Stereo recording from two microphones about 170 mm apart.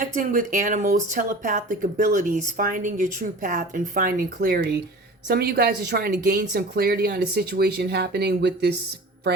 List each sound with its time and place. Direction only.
0.0 s speech: 50° right (ahead or behind); by 8.7 s 75° right (ahead or behind)